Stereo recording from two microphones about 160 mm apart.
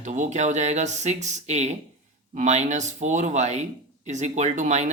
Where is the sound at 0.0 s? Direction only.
50° right (ahead or behind).